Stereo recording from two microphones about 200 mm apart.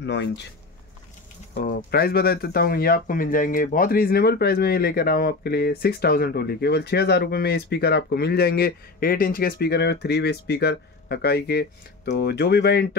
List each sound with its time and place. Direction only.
0.0 s speech: 60° left (ahead or behind)
1.5 s speech: 45° left (ahead or behind)